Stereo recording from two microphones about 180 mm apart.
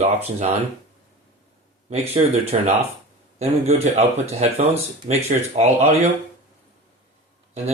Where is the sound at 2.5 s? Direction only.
35° right (ahead or behind).